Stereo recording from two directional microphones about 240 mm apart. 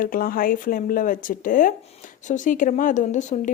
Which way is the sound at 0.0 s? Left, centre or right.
Left.